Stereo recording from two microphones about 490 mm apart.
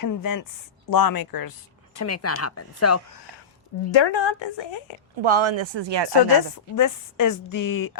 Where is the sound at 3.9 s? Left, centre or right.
Left.